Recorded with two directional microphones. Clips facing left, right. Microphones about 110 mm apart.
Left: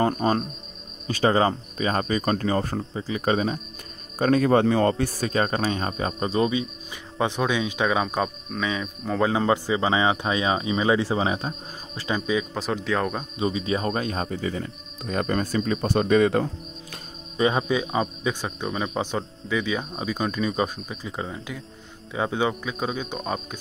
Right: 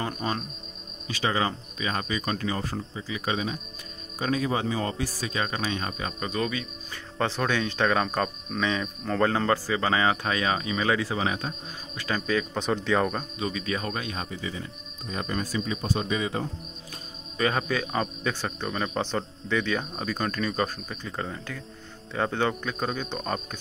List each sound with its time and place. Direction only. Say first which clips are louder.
0.0 s speech: left 8 dB; 45° left (ahead or behind)
4.2 s speech: left 8 dB; 55° left (ahead or behind); by 12.2 s 30° left (ahead or behind)
12.3 s speech: right 1 dB; 5° left (ahead or behind)
13.4 s speech: left 7 dB; 25° left (ahead or behind); by 16.4 s 60° left (ahead or behind)
17.4 s speech: left 4 dB; 20° left (ahead or behind)